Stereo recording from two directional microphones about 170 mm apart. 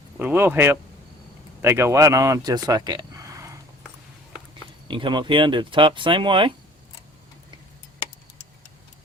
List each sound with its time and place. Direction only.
0.2 s speech: 10° right (ahead or behind)
4.9 s speech: 30° right (ahead or behind)